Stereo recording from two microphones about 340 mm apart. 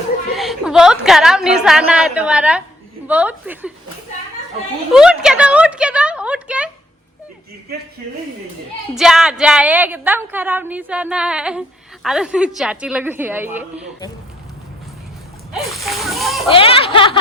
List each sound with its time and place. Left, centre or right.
0.3 s a woman's voice: centre
4.9 s a woman's voice: centre
9.0 s a woman's voice: centre
15.5 s speech: centre
16.5 s speech: centre